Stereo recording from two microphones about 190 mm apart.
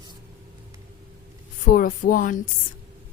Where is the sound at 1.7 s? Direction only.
45° left (ahead or behind).